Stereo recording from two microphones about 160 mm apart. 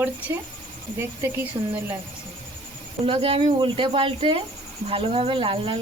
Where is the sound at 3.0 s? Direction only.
35° right (ahead or behind).